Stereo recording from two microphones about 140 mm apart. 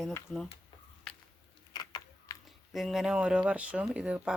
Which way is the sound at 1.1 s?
5° left (ahead or behind).